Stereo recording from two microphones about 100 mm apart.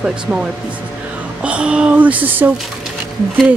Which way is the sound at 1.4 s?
10° right (ahead or behind).